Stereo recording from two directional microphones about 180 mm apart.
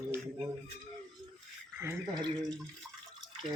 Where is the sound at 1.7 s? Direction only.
10° right (ahead or behind).